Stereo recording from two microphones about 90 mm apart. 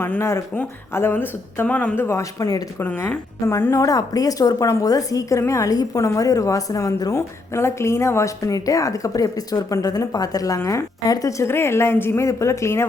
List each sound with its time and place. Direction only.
0.0 s speech: 30° left (ahead or behind)
2.0 s a woman's voice: 30° left (ahead or behind)
2.8 s a woman's voice: 20° left (ahead or behind)